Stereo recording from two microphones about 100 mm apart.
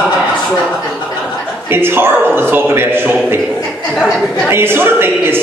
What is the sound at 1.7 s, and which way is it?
Speech, 20° right (ahead or behind).